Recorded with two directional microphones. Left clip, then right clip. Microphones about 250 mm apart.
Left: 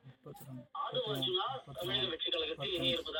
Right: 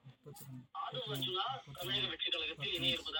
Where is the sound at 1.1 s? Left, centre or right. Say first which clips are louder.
Left 3 dB; right.